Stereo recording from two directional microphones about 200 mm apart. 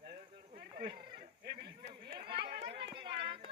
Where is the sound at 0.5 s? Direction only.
50° right (ahead or behind).